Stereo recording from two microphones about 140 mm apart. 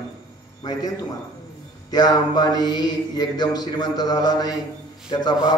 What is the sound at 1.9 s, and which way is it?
Mantra, 30° left (ahead or behind).